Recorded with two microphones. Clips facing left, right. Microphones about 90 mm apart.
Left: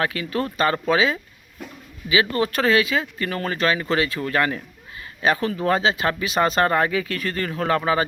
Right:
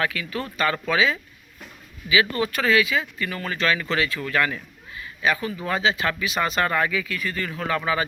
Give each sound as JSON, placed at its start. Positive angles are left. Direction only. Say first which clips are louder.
{"t": 0.0, "sound": "a man's voice", "louder": "left 3 dB", "side_deg": 35}